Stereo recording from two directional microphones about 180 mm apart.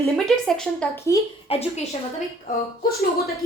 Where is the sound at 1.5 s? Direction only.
35° left (ahead or behind).